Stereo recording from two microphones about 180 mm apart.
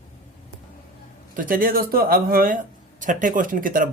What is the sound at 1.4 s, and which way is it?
Speech, 50° right (ahead or behind).